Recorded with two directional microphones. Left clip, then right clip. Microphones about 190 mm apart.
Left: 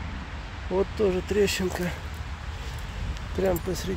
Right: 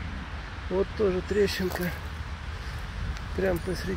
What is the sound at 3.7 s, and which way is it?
Speech, 15° left (ahead or behind).